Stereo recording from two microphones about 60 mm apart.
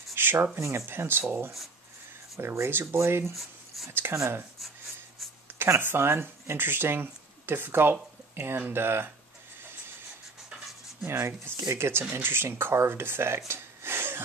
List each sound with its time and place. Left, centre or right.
0.1 s a sound: right
0.6 s speech: right
2.3 s speech: right
3.3 s a sound: centre
3.9 s speech: right
5.8 s speech: right
11.1 s speech: right
12.0 s speech: right
13.5 s gasp: right